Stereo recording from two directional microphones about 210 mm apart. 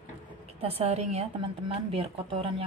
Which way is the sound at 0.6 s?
30° right (ahead or behind).